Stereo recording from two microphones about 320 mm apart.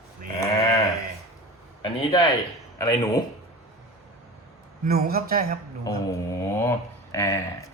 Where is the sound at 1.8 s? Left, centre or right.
Centre.